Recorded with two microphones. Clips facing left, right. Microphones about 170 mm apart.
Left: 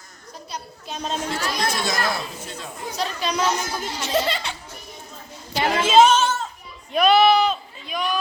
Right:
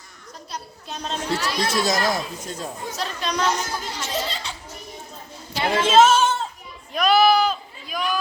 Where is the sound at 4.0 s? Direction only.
65° left (ahead or behind).